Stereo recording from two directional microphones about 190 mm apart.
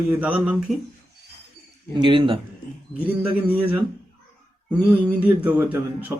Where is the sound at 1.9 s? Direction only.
25° right (ahead or behind).